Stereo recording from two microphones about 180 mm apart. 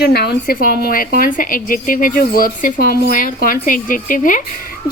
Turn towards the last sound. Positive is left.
turn(degrees=50)  # may be behind; listen again after turning